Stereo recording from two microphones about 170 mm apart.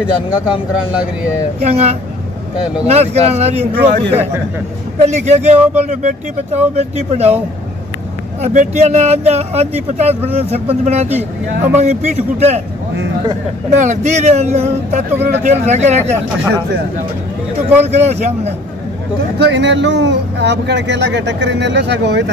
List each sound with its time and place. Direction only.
0.5 s speech: 5° right (ahead or behind)
1.6 s speech: 40° right (ahead or behind)
5.0 s speech: 40° right (ahead or behind)
8.4 s speech: 40° right (ahead or behind)
13.7 s speech: 45° right (ahead or behind)
17.6 s speech: 40° right (ahead or behind)
19.3 s speech: 85° right